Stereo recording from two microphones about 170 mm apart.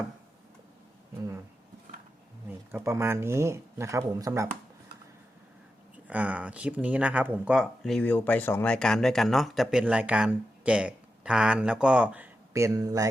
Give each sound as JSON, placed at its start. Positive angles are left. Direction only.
{"t": 2.5, "sound": "speech", "side_deg": -15}
{"t": 6.1, "sound": "speech", "side_deg": -10}